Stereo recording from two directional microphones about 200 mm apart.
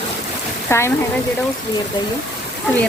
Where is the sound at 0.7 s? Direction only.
15° left (ahead or behind).